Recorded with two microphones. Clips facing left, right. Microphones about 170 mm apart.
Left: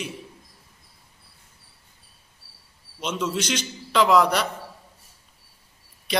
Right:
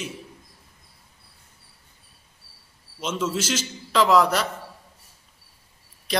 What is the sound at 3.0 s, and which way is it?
A man's voice, 5° right (ahead or behind).